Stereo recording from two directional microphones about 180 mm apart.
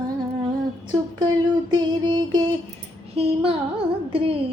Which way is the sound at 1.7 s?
25° right (ahead or behind).